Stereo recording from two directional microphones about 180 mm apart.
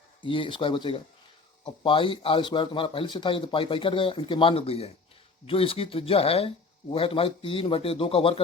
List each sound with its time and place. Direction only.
0.3 s a man's voice: 30° left (ahead or behind)